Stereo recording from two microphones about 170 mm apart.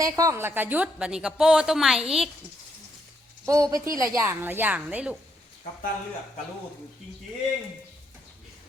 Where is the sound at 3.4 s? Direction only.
20° right (ahead or behind).